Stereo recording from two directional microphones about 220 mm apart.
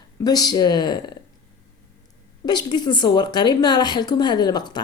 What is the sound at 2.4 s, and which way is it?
A woman's voice, 20° left (ahead or behind).